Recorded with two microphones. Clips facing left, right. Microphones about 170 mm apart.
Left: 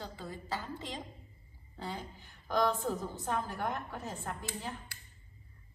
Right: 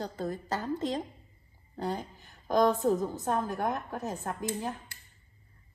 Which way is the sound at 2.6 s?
40° right (ahead or behind).